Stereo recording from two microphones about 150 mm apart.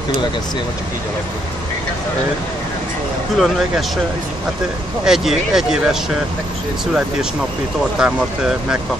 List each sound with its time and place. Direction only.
3.3 s speech: centre (ahead or behind)
5.0 s speech: 5° right (ahead or behind)
8.0 s speech: 5° right (ahead or behind)